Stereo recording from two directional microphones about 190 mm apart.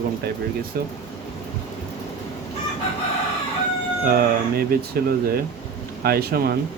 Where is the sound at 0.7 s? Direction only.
50° right (ahead or behind).